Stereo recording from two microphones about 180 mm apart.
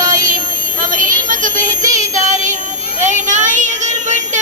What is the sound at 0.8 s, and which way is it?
Female singing, 50° right (ahead or behind).